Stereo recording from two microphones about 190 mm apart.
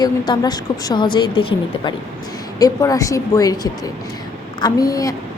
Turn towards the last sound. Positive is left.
turn(degrees=20)  # may be behind; listen again after turning